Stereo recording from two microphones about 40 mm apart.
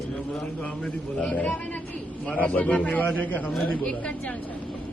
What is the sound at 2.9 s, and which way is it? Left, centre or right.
Speech, left.